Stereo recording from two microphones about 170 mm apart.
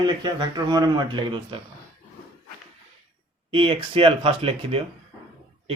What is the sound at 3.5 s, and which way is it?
Speech, 30° right (ahead or behind).